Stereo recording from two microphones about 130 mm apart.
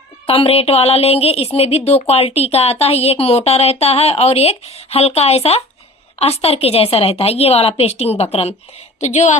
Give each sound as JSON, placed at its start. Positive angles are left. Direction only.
{"t": 0.3, "sound": "a woman's voice", "side_deg": 45}
{"t": 9.0, "sound": "a woman's voice", "side_deg": 65}